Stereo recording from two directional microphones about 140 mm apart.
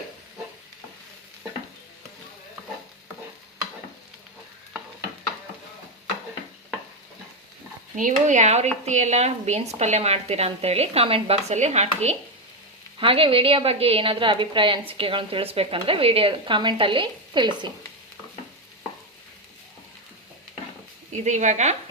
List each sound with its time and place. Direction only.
7.9 s a woman's voice: 65° right (ahead or behind)
13.0 s a woman's voice: 40° right (ahead or behind)
21.2 s speech: 60° right (ahead or behind)